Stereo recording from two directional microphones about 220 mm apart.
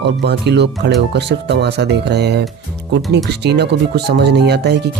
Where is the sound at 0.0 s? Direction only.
50° right (ahead or behind).